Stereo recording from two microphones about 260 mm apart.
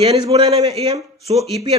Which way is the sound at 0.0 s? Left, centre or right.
Right.